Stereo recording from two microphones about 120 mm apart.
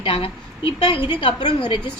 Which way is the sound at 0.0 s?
50° left (ahead or behind).